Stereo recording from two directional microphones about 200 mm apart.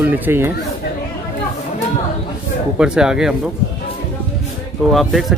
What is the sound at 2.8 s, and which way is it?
Speech, 5° right (ahead or behind).